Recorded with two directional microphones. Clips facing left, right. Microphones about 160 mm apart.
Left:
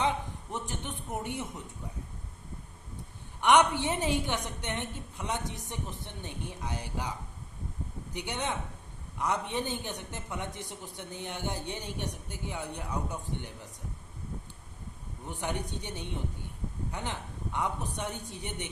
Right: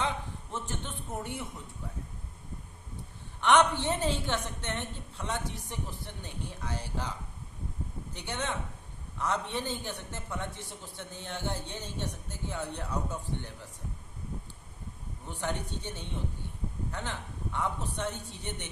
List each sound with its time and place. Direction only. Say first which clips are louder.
0.5 s a sound: left 1 dB; 15° left (ahead or behind)
3.4 s a man's voice: left 1 dB; 10° left (ahead or behind)
8.1 s a man's voice: left 1 dB; 15° left (ahead or behind)
15.3 s a man's voice: even; 15° left (ahead or behind)